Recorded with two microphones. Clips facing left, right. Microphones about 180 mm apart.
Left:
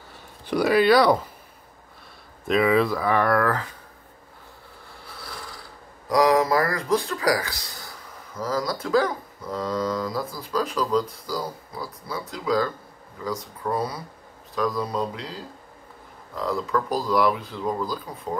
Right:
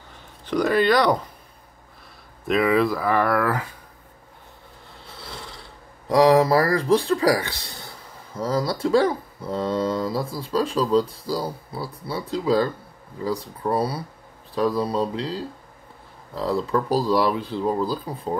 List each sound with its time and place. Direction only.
0.5 s speech: 10° left (ahead or behind)
2.4 s speech: centre (ahead or behind)
5.0 s mechanisms: 25° right (ahead or behind)
8.4 s speech: 30° right (ahead or behind)